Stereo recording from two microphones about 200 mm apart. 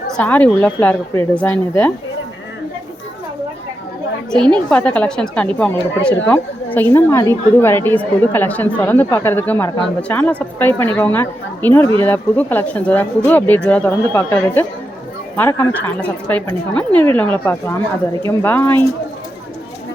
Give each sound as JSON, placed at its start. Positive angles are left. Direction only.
{"t": 0.2, "sound": "speech", "side_deg": 10}
{"t": 4.3, "sound": "a woman's voice", "side_deg": 5}